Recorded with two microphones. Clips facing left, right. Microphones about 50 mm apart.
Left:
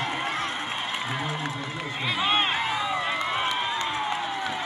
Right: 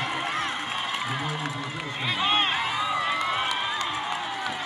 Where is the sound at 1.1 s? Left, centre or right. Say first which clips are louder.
Even; left.